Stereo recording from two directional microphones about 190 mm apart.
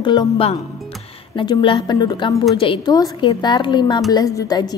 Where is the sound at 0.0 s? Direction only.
25° left (ahead or behind).